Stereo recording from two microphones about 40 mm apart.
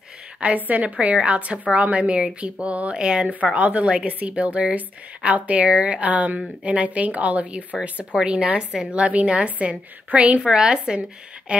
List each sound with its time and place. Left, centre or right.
0.6 s a woman's voice: right
8.1 s a woman's voice: right
10.5 s a woman's voice: centre